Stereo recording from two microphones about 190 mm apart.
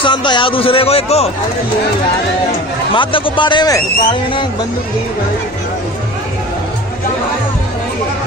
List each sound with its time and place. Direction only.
0.0 s speech: 25° left (ahead or behind)
2.9 s speech: 25° left (ahead or behind)